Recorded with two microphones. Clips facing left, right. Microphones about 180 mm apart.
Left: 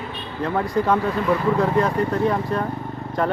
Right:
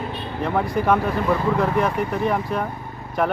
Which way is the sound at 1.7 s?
15° right (ahead or behind).